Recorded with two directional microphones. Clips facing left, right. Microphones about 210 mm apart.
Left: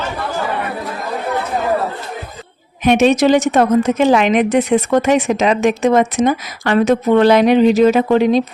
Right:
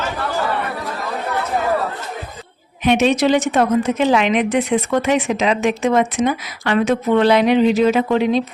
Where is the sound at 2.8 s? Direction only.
45° left (ahead or behind).